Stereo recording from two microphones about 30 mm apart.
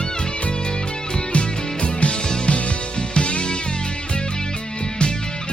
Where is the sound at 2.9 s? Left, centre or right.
Left.